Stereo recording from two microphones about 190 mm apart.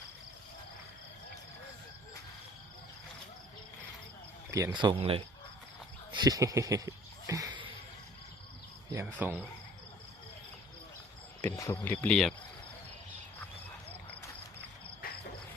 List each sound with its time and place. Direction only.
4.5 s speech: 20° right (ahead or behind)
6.1 s a sound: 20° right (ahead or behind)
8.9 s speech: 15° right (ahead or behind)
11.4 s speech: 15° left (ahead or behind)
12.0 s speech: 5° left (ahead or behind)